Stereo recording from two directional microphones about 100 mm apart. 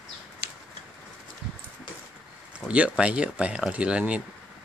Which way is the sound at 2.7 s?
10° right (ahead or behind).